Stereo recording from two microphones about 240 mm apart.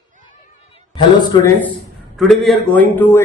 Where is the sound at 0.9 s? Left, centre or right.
Centre.